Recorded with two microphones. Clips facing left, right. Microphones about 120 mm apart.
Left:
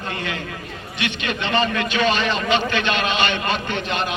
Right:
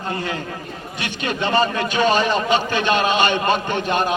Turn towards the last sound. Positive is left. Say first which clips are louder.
# right 4 dB
turn(degrees=-45)  # may be behind; listen again after turning